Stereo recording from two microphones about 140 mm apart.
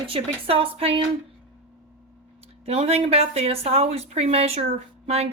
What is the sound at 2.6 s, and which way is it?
Speech, 45° right (ahead or behind).